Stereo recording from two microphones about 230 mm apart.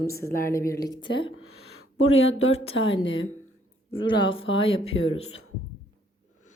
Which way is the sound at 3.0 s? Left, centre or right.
Left.